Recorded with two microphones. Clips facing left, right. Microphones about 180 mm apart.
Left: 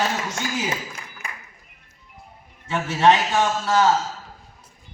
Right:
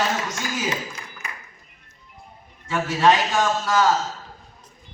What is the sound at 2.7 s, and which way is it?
A man's voice, 25° left (ahead or behind).